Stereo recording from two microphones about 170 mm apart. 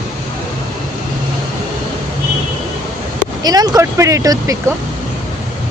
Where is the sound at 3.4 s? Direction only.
25° right (ahead or behind).